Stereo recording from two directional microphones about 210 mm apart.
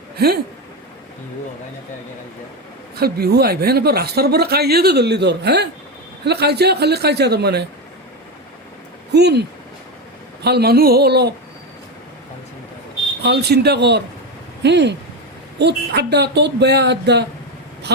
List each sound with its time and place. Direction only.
2.9 s speech: 50° right (ahead or behind)
9.1 s speech: 50° right (ahead or behind)
13.2 s speech: 50° right (ahead or behind)